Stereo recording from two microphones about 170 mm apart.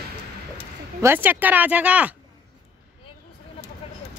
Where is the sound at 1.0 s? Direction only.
10° right (ahead or behind).